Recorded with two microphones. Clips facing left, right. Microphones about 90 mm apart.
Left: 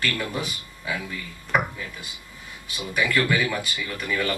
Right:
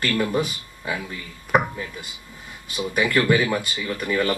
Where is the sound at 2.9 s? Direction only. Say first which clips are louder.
Right 3 dB; 40° right (ahead or behind).